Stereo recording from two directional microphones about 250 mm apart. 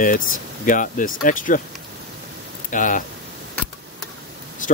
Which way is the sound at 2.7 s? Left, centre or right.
Left.